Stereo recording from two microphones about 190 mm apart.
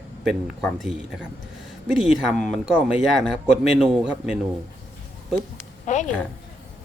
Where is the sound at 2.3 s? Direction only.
5° left (ahead or behind).